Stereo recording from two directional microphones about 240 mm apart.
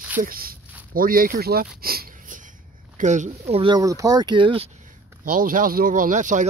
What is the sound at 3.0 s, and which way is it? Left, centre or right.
Speech, right.